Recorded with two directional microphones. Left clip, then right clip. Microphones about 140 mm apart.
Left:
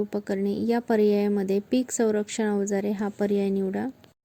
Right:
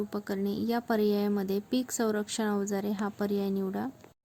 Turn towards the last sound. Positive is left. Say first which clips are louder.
# left 6 dB
turn(degrees=25)  # may be behind; listen again after turning